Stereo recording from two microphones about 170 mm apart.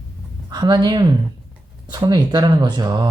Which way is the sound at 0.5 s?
25° right (ahead or behind).